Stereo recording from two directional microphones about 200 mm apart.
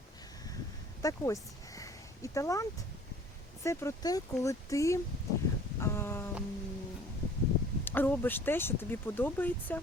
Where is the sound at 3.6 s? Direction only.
15° left (ahead or behind).